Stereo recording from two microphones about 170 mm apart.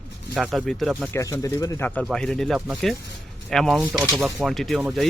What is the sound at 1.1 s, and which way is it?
Speech, 20° left (ahead or behind).